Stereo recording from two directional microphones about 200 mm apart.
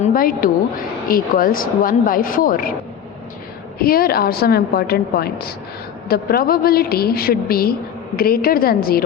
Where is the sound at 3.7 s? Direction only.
45° left (ahead or behind).